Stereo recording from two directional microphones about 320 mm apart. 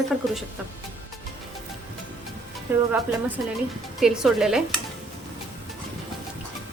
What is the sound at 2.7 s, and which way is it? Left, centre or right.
Speech, centre.